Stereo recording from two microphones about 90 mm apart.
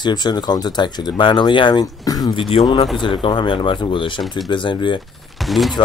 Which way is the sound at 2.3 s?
85° left.